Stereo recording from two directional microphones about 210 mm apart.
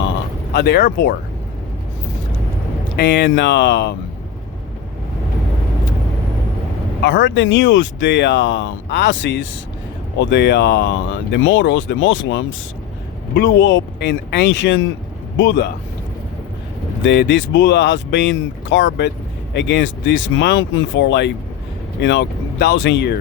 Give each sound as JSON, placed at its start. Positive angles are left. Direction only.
{"t": 0.5, "sound": "speech", "side_deg": 50}
{"t": 3.0, "sound": "speech", "side_deg": 55}
{"t": 7.0, "sound": "speech", "side_deg": 55}
{"t": 17.0, "sound": "speech", "side_deg": 55}